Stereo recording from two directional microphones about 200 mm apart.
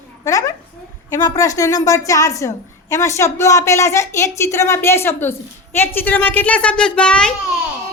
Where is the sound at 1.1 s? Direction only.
15° left (ahead or behind).